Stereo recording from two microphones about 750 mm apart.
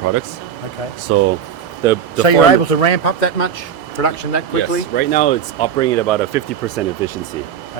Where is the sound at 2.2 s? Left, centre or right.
Left.